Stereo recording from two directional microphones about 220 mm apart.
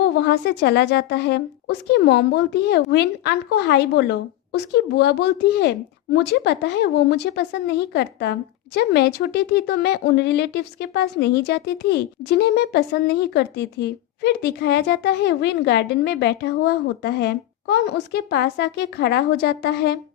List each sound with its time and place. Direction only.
0.0 s speech: 50° left (ahead or behind)